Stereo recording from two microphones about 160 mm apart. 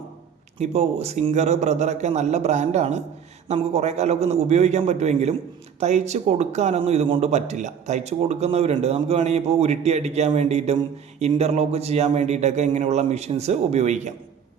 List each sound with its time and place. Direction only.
0.6 s a man's voice: 40° right (ahead or behind)